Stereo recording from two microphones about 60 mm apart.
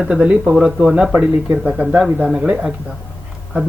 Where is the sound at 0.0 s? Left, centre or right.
Centre.